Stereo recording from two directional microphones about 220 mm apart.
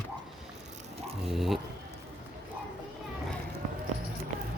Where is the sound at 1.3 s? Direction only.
Centre (ahead or behind).